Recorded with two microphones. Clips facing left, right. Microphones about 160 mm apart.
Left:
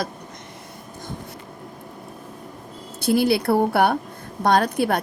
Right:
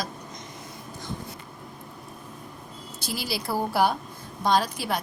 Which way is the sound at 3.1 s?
60° left (ahead or behind).